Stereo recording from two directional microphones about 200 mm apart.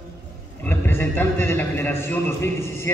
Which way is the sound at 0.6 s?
10° left (ahead or behind).